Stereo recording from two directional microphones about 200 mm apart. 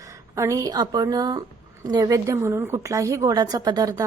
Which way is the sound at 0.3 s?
15° right (ahead or behind).